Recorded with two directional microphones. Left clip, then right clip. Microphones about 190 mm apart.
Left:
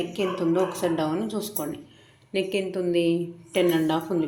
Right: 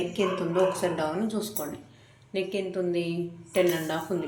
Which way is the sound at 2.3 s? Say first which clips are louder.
Left 4 dB; 45° left (ahead or behind).